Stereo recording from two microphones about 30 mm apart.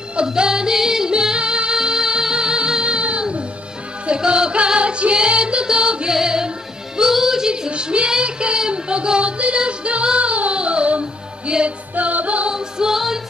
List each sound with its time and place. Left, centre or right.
0.3 s music: right
4.3 s music: right
7.7 s speech: right
8.2 s child singing: right
8.5 s music: right
11.9 s music: right
12.5 s music: right